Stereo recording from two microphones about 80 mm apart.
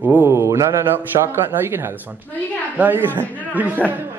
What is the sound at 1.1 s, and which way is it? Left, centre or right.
Speech, right.